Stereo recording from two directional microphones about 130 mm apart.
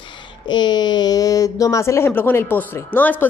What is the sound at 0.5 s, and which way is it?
Speech, 35° left (ahead or behind).